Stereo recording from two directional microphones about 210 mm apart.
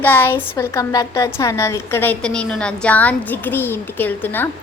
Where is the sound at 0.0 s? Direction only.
10° left (ahead or behind).